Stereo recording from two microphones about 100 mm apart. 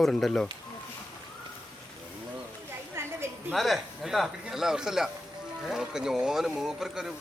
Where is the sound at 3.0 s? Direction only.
25° right (ahead or behind).